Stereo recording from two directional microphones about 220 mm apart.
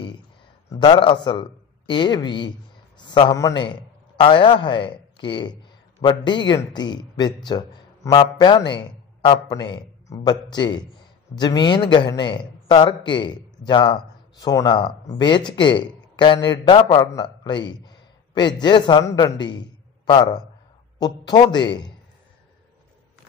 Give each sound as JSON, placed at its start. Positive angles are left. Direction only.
{"t": 0.7, "sound": "a man's voice", "side_deg": 20}